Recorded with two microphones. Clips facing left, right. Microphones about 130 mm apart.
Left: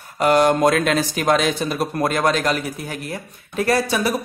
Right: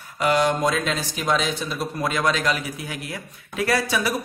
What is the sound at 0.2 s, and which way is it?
A man's voice, 50° left (ahead or behind).